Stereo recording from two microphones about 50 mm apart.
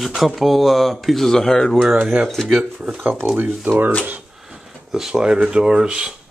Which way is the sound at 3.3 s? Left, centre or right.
Right.